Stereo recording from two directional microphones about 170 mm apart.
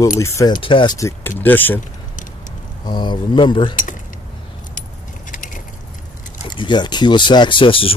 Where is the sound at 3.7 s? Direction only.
50° left (ahead or behind).